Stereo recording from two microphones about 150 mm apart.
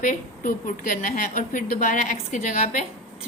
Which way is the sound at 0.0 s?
60° left (ahead or behind).